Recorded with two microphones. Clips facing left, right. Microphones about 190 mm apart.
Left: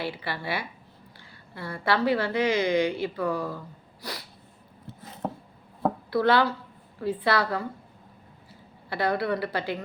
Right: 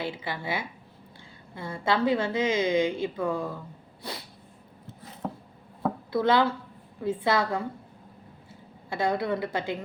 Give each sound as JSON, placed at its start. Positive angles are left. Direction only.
{"t": 0.0, "sound": "a woman's voice", "side_deg": -20}
{"t": 5.2, "sound": "a sound", "side_deg": 35}
{"t": 6.1, "sound": "a woman's voice", "side_deg": -20}
{"t": 9.0, "sound": "a woman's voice", "side_deg": -20}